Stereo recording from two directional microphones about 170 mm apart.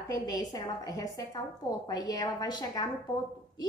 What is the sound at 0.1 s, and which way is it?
A woman's voice, 25° left (ahead or behind).